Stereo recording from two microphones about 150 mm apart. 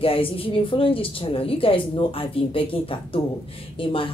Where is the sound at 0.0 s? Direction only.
40° left (ahead or behind).